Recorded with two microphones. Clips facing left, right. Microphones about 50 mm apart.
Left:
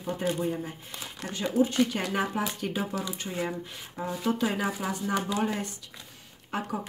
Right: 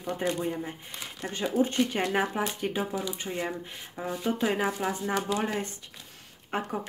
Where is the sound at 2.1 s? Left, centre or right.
Centre.